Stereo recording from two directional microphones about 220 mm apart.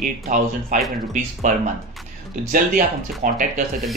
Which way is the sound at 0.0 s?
35° right (ahead or behind).